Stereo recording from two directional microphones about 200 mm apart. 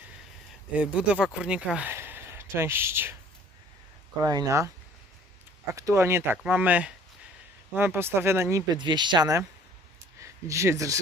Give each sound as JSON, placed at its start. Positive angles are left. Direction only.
{"t": 0.7, "sound": "speech", "side_deg": -5}
{"t": 4.2, "sound": "speech", "side_deg": -20}
{"t": 5.7, "sound": "speech", "side_deg": -15}